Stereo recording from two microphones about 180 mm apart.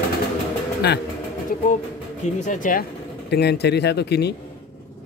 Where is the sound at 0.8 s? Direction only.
65° left (ahead or behind).